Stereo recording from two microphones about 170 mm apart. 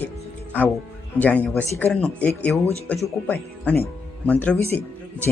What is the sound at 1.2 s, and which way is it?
Speech, 10° left (ahead or behind).